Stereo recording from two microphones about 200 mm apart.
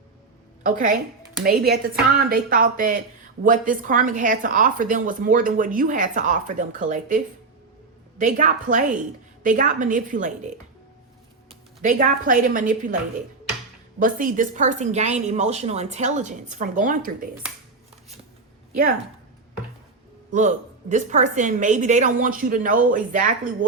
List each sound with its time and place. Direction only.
0.6 s a woman's voice: 40° right (ahead or behind)
8.2 s a woman's voice: 40° right (ahead or behind)
11.8 s a woman's voice: 40° right (ahead or behind)
14.0 s a woman's voice: 45° right (ahead or behind)
20.3 s a woman's voice: 40° right (ahead or behind)